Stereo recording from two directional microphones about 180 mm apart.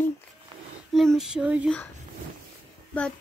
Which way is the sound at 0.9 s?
Centre (ahead or behind).